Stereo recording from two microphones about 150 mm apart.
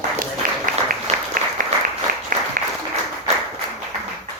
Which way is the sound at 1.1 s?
45° right (ahead or behind).